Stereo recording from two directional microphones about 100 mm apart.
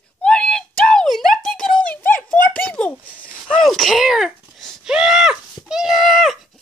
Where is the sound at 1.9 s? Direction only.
20° left (ahead or behind).